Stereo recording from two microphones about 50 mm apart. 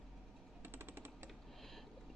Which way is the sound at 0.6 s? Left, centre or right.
Right.